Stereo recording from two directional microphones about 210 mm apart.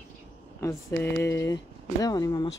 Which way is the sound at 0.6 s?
15° left (ahead or behind).